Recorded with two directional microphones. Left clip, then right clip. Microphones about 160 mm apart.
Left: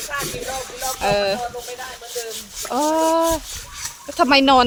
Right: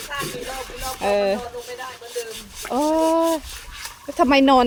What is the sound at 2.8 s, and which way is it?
Speech, 25° right (ahead or behind).